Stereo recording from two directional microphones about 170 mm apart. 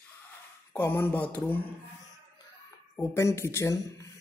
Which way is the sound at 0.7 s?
15° left (ahead or behind).